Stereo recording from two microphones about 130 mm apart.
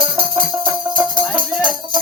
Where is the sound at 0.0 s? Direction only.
40° right (ahead or behind).